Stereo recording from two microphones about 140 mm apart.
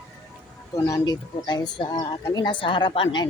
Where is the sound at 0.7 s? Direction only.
25° left (ahead or behind).